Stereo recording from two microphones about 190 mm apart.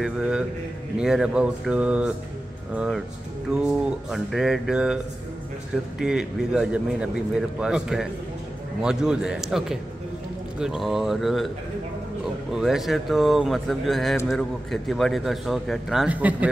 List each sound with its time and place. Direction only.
0.0 s a man's voice: 5° right (ahead or behind)
12.5 s a man's voice: centre (ahead or behind)